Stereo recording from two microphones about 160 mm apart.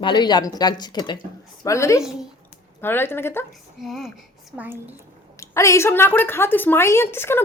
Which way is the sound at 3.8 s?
Centre (ahead or behind).